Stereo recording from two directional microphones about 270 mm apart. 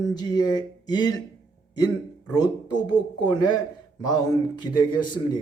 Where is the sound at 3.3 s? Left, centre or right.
Centre.